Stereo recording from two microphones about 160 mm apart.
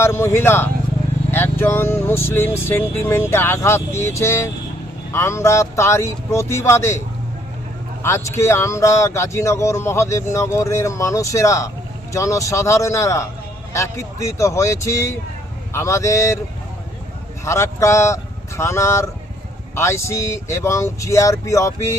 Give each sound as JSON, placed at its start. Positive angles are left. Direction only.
{"t": 0.0, "sound": "speech", "side_deg": 15}
{"t": 8.0, "sound": "speech", "side_deg": 15}
{"t": 17.4, "sound": "speech", "side_deg": 15}